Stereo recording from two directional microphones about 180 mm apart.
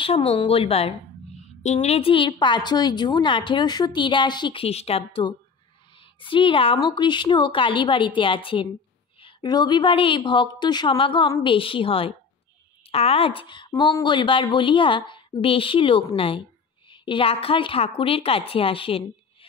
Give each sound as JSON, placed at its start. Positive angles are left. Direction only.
{"t": 0.0, "sound": "a woman's voice", "side_deg": 35}